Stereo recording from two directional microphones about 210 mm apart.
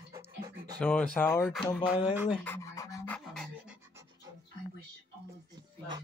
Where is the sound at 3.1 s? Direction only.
Centre (ahead or behind).